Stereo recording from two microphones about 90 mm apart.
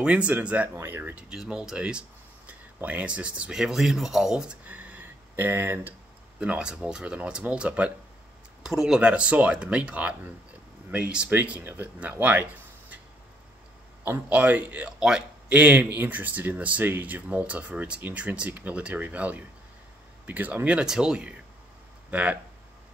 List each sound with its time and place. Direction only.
0.0 s speech: 15° right (ahead or behind)
1.3 s speech: 10° right (ahead or behind)
6.4 s speech: 10° right (ahead or behind)
14.0 s a man's voice: 20° right (ahead or behind)